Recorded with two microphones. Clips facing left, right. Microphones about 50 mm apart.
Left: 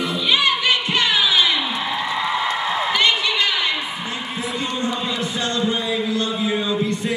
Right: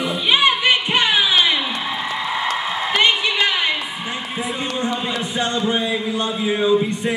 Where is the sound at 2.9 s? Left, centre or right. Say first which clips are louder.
Right 4 dB; right.